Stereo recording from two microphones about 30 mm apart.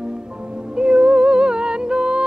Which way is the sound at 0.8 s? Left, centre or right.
Right.